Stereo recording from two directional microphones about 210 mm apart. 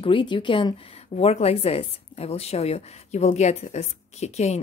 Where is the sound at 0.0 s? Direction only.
25° left (ahead or behind).